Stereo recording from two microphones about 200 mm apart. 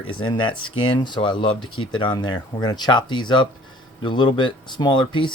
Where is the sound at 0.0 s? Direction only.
25° left (ahead or behind).